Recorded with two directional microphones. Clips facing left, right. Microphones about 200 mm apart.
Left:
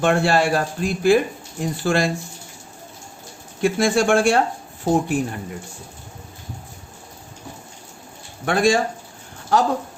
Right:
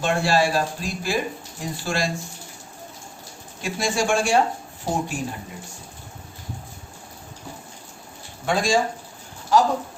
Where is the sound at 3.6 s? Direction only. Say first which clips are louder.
Left 6 dB; 55° left (ahead or behind).